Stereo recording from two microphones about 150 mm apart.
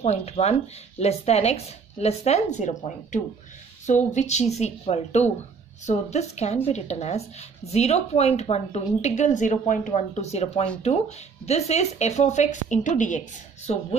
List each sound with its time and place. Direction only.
0.0 s speech: 45° left (ahead or behind)
13.7 s speech: 45° left (ahead or behind)